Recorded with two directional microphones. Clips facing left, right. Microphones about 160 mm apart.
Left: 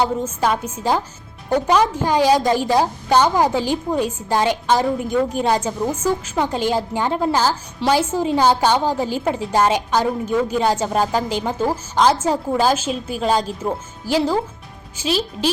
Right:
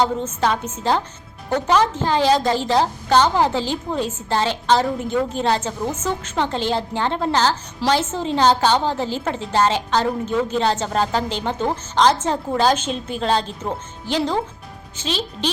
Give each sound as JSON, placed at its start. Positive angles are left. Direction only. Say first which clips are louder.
{"t": 0.0, "sound": "a woman's voice", "louder": "even", "side_deg": 10}